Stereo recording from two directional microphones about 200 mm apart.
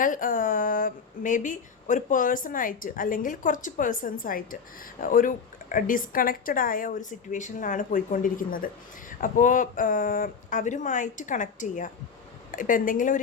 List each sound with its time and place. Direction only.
0.0 s a woman's voice: 40° left (ahead or behind)